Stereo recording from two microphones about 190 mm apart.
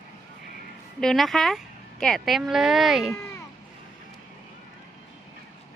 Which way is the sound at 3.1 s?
15° left (ahead or behind).